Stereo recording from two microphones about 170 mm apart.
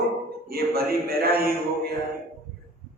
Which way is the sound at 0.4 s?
65° right (ahead or behind).